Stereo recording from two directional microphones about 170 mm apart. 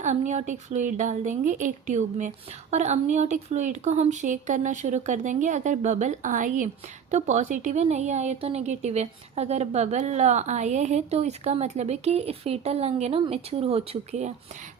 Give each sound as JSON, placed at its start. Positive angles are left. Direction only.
{"t": 0.0, "sound": "a woman's voice", "side_deg": -45}